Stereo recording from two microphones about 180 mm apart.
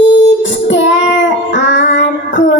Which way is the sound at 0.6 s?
90° left.